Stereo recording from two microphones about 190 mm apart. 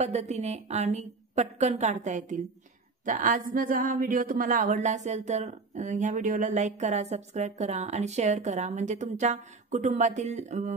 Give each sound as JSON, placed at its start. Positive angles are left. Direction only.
{"t": 0.0, "sound": "speech", "side_deg": -35}